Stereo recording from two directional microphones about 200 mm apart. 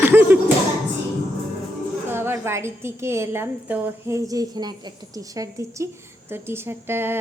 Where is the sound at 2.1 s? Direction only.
10° right (ahead or behind).